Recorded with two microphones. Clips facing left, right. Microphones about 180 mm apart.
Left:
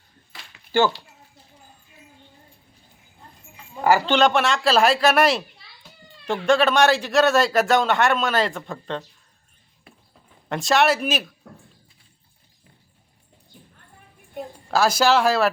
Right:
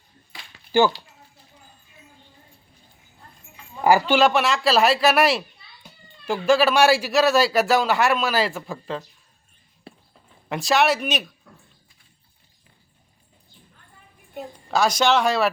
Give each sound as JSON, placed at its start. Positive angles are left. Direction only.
{"t": 0.3, "sound": "a sound", "side_deg": 0}
{"t": 0.7, "sound": "speech", "side_deg": -15}
{"t": 3.8, "sound": "a man's voice", "side_deg": -15}
{"t": 10.5, "sound": "a man's voice", "side_deg": 0}
{"t": 14.7, "sound": "a man's voice", "side_deg": 5}